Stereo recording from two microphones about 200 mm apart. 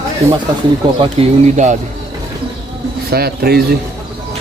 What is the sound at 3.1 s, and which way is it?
Speech, 50° right (ahead or behind).